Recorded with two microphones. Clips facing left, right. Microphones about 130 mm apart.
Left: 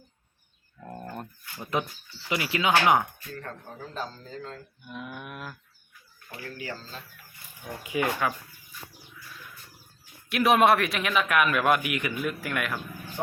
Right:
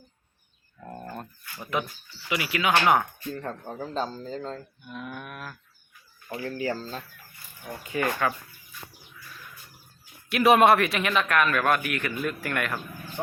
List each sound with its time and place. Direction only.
0.8 s a sound: 5° right (ahead or behind)
2.3 s speech: 30° left (ahead or behind)
3.3 s speech: 25° right (ahead or behind)
4.9 s livestock: 10° left (ahead or behind)
6.2 s speech: 35° right (ahead or behind)
7.9 s livestock: 10° left (ahead or behind)
10.2 s speech: centre (ahead or behind)